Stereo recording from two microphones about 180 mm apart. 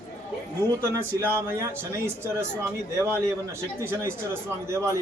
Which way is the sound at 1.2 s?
15° right (ahead or behind).